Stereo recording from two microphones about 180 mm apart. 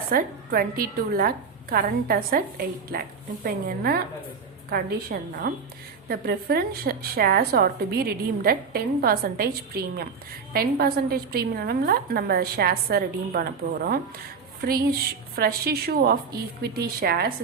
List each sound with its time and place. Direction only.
0.1 s a woman's voice: 55° right (ahead or behind)